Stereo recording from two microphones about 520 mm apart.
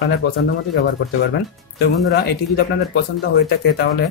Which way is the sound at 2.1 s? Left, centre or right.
Centre.